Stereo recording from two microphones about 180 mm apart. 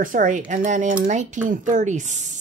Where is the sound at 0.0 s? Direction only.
45° right (ahead or behind).